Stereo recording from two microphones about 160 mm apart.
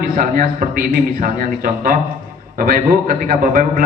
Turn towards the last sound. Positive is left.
turn(degrees=-60)  # may be behind; listen again after turning